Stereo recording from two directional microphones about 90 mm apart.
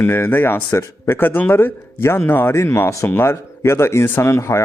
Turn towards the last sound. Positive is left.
turn(degrees=30)  # may be behind; listen again after turning